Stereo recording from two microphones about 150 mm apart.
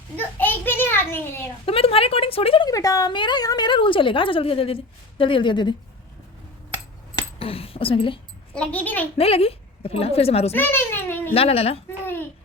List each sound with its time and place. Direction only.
0.3 s a child's voice: 15° left (ahead or behind)
1.6 s a woman's voice: 40° left (ahead or behind)
2.6 s a woman's voice: 25° left (ahead or behind)
7.3 s a sound: 40° left (ahead or behind)
8.5 s a child's voice: 10° left (ahead or behind)
9.1 s a woman's voice: 40° left (ahead or behind)
10.5 s a sound: 15° left (ahead or behind)
11.3 s a woman's voice: 40° left (ahead or behind)